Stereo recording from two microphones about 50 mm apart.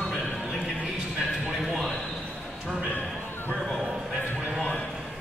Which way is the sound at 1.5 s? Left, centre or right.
Centre.